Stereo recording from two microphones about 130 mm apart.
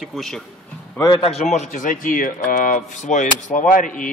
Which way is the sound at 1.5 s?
75° left (ahead or behind).